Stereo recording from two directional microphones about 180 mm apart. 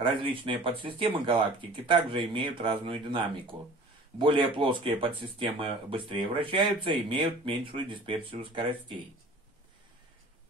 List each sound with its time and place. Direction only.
0.0 s speech: 30° right (ahead or behind)